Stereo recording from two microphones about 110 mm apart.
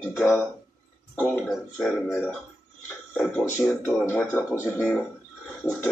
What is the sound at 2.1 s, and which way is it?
Speech, 20° left (ahead or behind).